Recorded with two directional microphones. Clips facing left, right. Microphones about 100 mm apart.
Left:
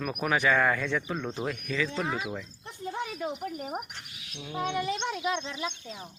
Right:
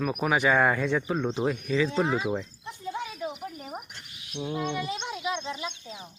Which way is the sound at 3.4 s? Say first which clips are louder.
Left 3 dB; 55° left (ahead or behind).